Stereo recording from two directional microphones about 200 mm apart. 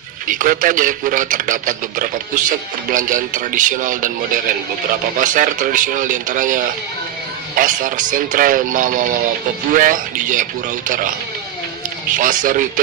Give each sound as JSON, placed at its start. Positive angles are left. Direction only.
{"t": 0.3, "sound": "a man's voice", "side_deg": -45}
{"t": 5.2, "sound": "a man's voice", "side_deg": -40}
{"t": 12.1, "sound": "speech", "side_deg": -40}